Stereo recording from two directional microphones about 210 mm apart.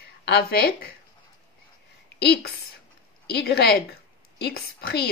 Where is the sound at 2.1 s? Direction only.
50° left (ahead or behind).